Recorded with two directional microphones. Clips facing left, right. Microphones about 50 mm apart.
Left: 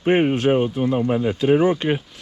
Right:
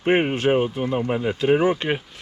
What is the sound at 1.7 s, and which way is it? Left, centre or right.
Speech, right.